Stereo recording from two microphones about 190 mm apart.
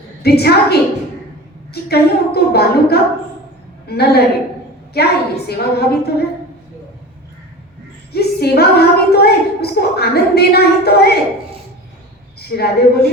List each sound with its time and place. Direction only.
0.2 s a woman's voice: 55° left (ahead or behind)
8.1 s a woman's voice: 55° left (ahead or behind)
12.4 s a woman's voice: 55° left (ahead or behind)